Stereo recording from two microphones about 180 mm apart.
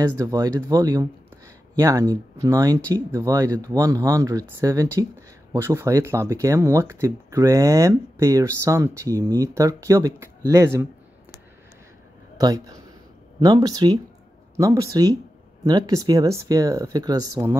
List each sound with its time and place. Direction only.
0.2 s speech: 20° right (ahead or behind)
12.4 s speech: 20° right (ahead or behind)